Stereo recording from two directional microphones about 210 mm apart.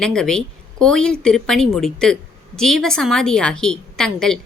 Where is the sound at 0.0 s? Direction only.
5° left (ahead or behind).